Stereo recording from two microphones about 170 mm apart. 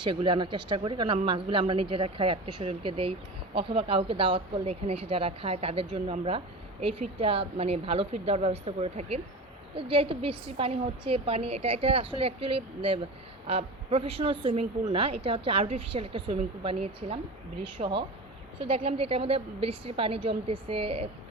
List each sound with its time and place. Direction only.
0.0 s speech: 30° right (ahead or behind)